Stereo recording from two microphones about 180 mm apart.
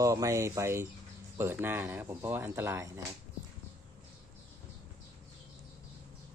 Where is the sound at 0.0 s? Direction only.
20° right (ahead or behind).